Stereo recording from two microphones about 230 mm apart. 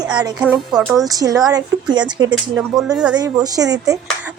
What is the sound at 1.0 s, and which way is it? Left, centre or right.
Speech, centre.